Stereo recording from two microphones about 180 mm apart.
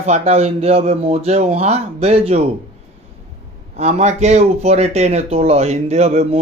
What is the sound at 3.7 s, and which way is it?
Speech, 35° right (ahead or behind).